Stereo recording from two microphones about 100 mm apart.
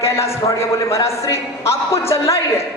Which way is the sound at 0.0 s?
30° left (ahead or behind).